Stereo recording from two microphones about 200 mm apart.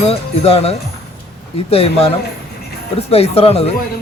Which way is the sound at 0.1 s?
30° left (ahead or behind).